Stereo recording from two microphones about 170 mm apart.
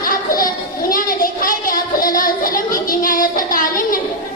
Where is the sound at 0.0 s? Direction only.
55° left (ahead or behind).